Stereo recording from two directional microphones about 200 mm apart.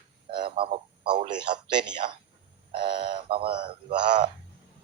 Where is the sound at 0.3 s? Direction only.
25° right (ahead or behind).